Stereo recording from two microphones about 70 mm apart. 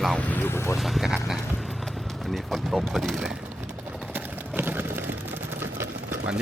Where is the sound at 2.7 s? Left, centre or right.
Centre.